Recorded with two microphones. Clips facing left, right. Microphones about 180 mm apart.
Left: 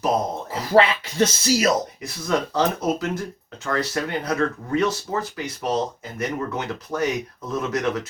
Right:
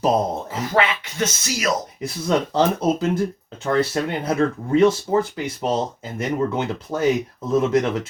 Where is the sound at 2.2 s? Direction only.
25° right (ahead or behind).